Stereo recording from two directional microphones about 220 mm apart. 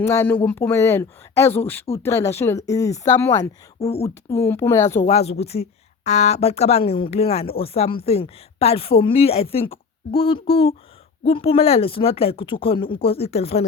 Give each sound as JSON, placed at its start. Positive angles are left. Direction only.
{"t": 0.0, "sound": "speech", "side_deg": 10}
{"t": 3.8, "sound": "speech", "side_deg": 30}
{"t": 4.3, "sound": "speech", "side_deg": 10}
{"t": 4.9, "sound": "speech", "side_deg": 30}